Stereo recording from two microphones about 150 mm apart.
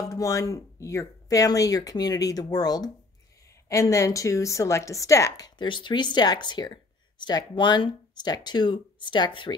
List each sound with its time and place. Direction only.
0.0 s a woman's voice: 20° left (ahead or behind)